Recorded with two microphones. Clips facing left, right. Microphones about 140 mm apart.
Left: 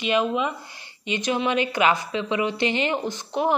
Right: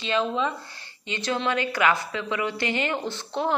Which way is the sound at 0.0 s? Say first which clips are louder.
Left 2 dB; 15° left (ahead or behind).